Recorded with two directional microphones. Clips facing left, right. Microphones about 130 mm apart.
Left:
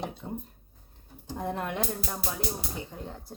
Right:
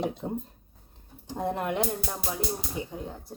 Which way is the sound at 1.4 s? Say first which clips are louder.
Right 4 dB; 15° right (ahead or behind).